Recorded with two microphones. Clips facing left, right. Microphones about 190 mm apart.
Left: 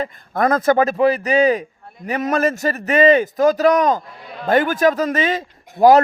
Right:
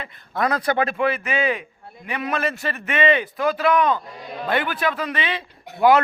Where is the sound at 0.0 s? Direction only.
45° left (ahead or behind).